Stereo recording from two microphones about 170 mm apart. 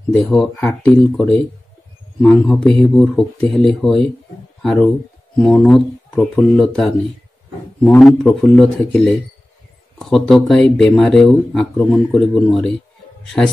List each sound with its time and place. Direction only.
0.1 s speech: 5° left (ahead or behind)